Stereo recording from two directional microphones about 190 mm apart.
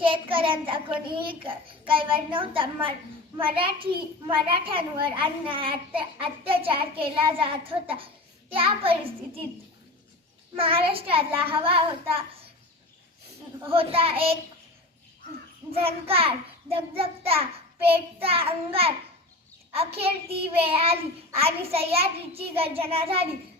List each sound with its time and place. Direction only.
0.0 s a child's voice: 25° right (ahead or behind)
10.6 s a child's voice: 30° right (ahead or behind)
13.7 s a child's voice: 30° right (ahead or behind)
15.7 s a child's voice: 30° right (ahead or behind)